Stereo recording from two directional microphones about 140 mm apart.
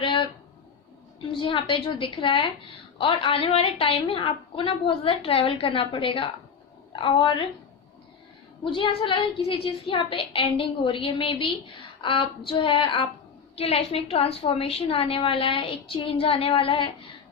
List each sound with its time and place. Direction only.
0.0 s a sound: 35° left (ahead or behind)
1.3 s a woman's voice: 35° left (ahead or behind)
8.6 s a woman's voice: 40° left (ahead or behind)